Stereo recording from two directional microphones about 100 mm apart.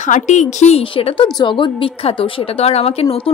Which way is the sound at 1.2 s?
45° left (ahead or behind).